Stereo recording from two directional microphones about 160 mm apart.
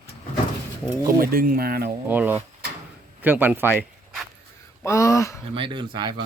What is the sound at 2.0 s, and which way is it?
Speech, 10° right (ahead or behind).